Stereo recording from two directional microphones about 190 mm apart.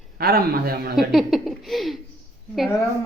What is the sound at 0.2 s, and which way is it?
Speech, 55° right (ahead or behind).